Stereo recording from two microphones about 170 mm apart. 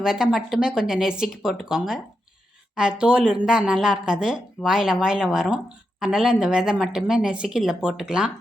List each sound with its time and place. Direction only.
0.0 s speech: 5° right (ahead or behind)